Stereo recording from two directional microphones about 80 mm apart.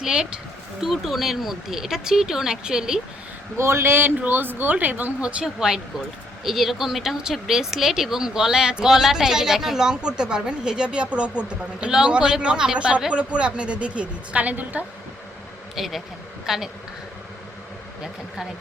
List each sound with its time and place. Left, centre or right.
0.0 s speech: centre
3.6 s speech: right
5.2 s speech: centre
15.7 s speech: centre